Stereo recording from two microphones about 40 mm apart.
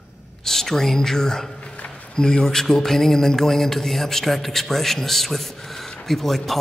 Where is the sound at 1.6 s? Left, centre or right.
Left.